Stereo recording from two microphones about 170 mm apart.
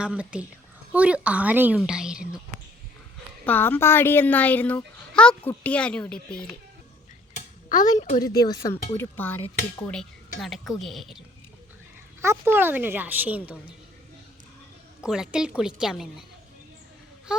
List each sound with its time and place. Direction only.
0.0 s a woman's voice: 5° right (ahead or behind)
3.4 s a child's voice: 10° left (ahead or behind)
7.3 s dishes: 50° left (ahead or behind)
7.9 s speech: 45° left (ahead or behind)
8.2 s a child's voice: 20° left (ahead or behind)
10.4 s a woman's voice: centre (ahead or behind)
12.2 s a woman's voice: 15° right (ahead or behind)
15.0 s a woman's voice: 5° right (ahead or behind)